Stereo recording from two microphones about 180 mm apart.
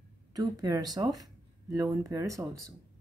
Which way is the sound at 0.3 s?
20° right (ahead or behind).